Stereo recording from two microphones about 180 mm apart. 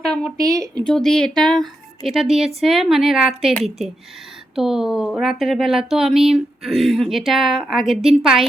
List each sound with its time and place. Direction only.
0.0 s a sound: 5° left (ahead or behind)
0.3 s speech: 20° right (ahead or behind)
0.9 s speech: 5° left (ahead or behind)